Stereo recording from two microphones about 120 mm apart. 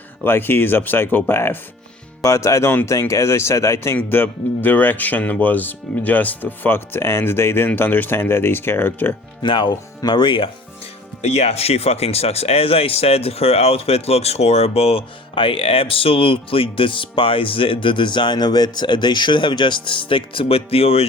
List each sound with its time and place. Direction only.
0.3 s speech: 20° left (ahead or behind)
9.4 s speech: 40° left (ahead or behind)
11.2 s speech: 65° left (ahead or behind)